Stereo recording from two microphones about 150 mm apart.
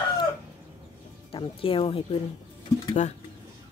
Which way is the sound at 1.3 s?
40° left (ahead or behind).